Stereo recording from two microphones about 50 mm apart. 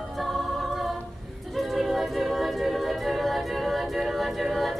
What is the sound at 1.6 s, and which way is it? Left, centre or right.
A capella, centre.